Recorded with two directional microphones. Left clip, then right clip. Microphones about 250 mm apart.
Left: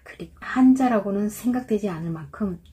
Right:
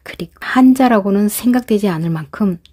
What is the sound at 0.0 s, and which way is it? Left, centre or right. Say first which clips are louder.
A woman's voice: right 10 dB; right.